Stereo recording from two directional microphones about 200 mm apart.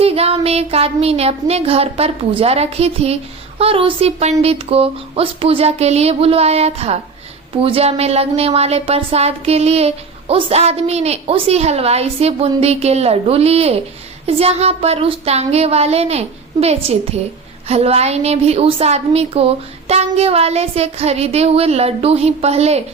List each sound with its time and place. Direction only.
0.0 s a woman's voice: 30° right (ahead or behind)